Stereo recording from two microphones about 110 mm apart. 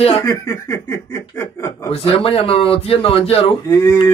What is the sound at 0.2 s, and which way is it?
Speech, 30° left (ahead or behind).